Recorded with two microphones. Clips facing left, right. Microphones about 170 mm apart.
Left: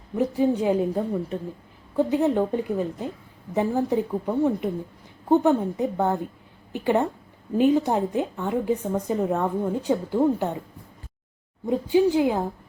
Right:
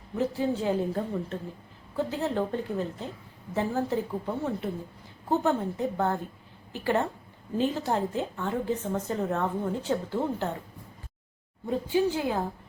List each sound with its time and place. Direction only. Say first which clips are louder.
0.2 s a woman's voice: left 6 dB; 15° left (ahead or behind)
11.6 s a woman's voice: left 6 dB; 15° left (ahead or behind)